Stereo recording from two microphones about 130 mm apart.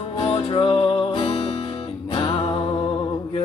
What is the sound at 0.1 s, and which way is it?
Music, 50° left (ahead or behind).